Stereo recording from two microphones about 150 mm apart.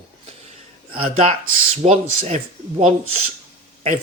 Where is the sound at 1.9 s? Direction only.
50° right (ahead or behind).